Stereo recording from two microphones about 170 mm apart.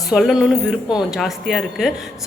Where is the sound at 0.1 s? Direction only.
Centre (ahead or behind).